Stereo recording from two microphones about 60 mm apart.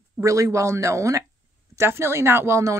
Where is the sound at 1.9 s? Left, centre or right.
Right.